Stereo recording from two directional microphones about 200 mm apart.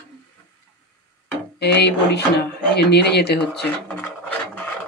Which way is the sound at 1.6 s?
55° left (ahead or behind).